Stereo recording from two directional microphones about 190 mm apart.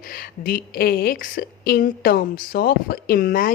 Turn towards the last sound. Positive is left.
turn(degrees=50)  # may be behind; listen again after turning